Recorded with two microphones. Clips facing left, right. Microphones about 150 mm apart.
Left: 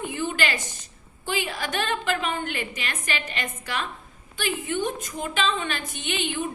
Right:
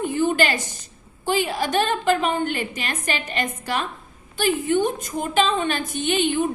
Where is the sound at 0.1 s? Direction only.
40° right (ahead or behind).